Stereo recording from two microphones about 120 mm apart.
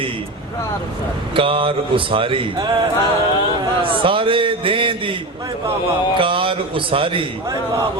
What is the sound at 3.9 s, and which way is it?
Speech, 45° right (ahead or behind).